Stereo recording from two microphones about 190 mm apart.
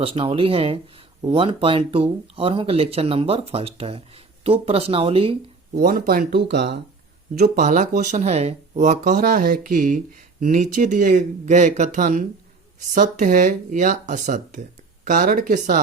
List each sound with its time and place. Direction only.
0.0 s speech: 30° right (ahead or behind)
5.8 s speech: 50° right (ahead or behind)
7.3 s speech: 50° right (ahead or behind)